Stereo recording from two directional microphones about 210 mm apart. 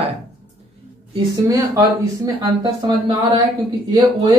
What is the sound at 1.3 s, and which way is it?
Speech, 15° right (ahead or behind).